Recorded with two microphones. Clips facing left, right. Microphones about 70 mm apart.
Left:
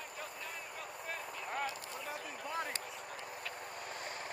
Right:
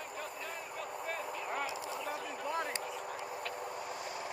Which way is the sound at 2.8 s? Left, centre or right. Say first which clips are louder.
Right 6 dB; right.